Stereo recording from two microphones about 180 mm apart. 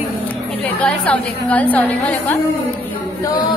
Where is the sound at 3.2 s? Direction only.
20° left (ahead or behind).